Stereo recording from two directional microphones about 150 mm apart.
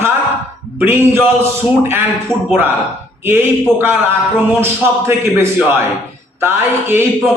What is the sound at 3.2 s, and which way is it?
A man's voice, 15° right (ahead or behind).